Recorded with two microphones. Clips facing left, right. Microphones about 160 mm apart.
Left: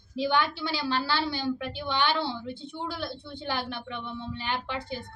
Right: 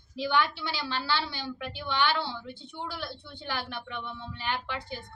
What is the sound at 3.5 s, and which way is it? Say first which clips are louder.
A woman's voice: left 1 dB; 25° left (ahead or behind).